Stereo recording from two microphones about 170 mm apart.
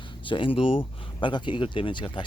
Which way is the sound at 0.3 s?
30° left (ahead or behind).